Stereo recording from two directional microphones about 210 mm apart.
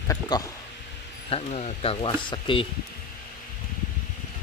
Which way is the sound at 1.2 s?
30° left (ahead or behind).